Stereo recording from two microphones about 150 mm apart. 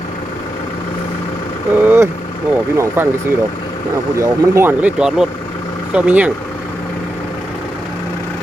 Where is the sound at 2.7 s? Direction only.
20° right (ahead or behind).